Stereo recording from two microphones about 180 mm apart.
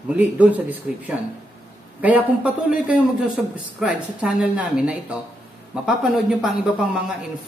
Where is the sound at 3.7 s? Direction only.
5° right (ahead or behind).